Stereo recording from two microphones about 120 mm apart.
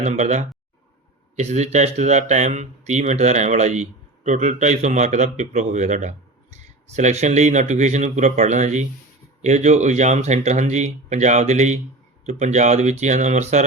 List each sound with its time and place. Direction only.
0.0 s speech: 75° right (ahead or behind)